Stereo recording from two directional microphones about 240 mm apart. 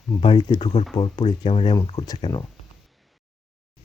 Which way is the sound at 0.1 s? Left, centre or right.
Centre.